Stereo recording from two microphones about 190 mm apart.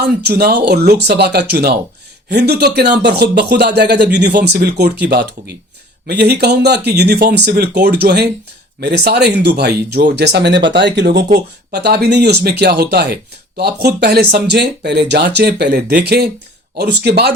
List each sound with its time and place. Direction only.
0.0 s speech: 60° right (ahead or behind)